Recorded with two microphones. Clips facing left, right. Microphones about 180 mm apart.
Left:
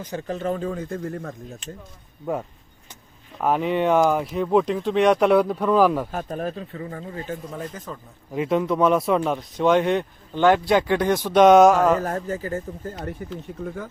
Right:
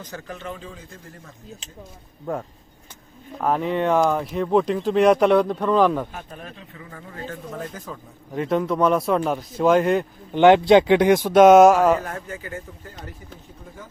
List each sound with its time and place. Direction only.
0.0 s speech: 15° left (ahead or behind)
0.3 s speech: 35° left (ahead or behind); by 1.3 s 60° left (ahead or behind)
3.4 s speech: 5° left (ahead or behind)
6.1 s speech: 45° left (ahead or behind)
7.6 s speech: 5° right (ahead or behind)
10.3 s speech: 20° right (ahead or behind); by 12.0 s 5° right (ahead or behind)
12.0 s speech: 35° left (ahead or behind)
13.5 s speech: 65° left (ahead or behind)